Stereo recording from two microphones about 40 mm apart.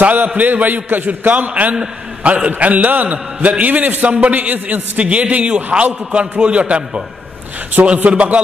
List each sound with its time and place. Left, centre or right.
0.0 s a man's voice: right
4.1 s a man's voice: right
4.4 s a man's voice: right
7.8 s a man's voice: right